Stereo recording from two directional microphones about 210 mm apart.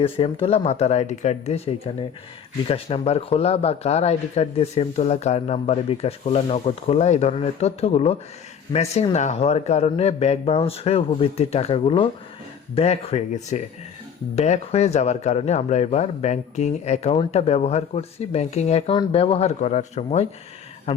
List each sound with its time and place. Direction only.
0.0 s a man's voice: 25° left (ahead or behind)